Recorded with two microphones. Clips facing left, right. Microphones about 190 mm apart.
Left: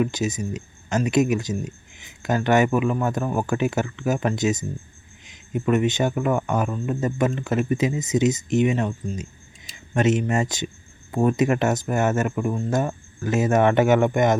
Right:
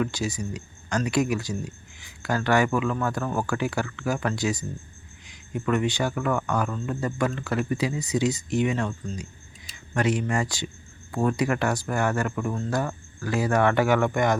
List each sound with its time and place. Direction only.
0.0 s speech: 20° left (ahead or behind)